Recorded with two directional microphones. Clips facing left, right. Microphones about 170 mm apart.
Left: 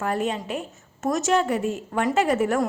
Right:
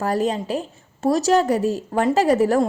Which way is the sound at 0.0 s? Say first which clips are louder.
Right 4 dB; 35° right (ahead or behind).